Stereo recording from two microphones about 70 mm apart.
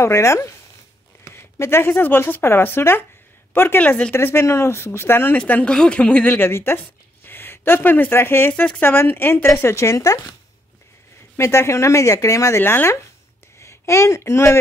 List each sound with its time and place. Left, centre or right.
0.0 s speech: left
3.8 s speech: left
4.1 s speech: left
5.7 s speech: centre
6.3 s speech: left
11.3 s speech: left